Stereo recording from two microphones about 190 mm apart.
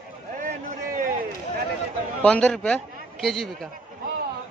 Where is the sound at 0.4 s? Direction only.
45° right (ahead or behind).